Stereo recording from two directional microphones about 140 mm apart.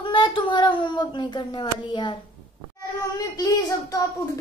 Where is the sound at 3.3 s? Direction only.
25° left (ahead or behind).